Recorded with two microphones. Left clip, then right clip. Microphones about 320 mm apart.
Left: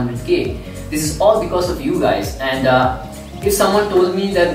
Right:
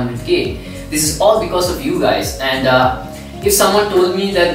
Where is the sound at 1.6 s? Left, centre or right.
Centre.